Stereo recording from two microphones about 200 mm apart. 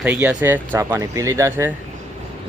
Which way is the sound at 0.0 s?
10° right (ahead or behind).